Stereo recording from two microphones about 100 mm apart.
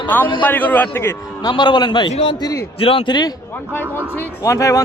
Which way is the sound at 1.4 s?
50° left (ahead or behind).